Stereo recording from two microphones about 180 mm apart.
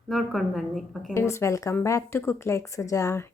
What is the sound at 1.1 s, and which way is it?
Speech, 15° left (ahead or behind).